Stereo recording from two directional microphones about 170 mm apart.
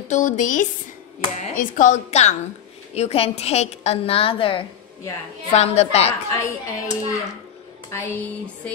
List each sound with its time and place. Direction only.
0.1 s a woman's voice: 50° left (ahead or behind)
6.3 s music: 20° left (ahead or behind)